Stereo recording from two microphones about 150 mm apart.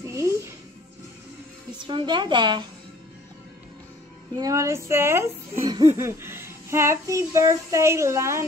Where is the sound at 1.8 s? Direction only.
30° right (ahead or behind).